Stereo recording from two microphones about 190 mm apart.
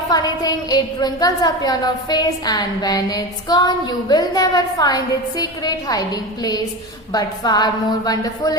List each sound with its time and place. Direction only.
0.1 s a woman's voice: 20° left (ahead or behind)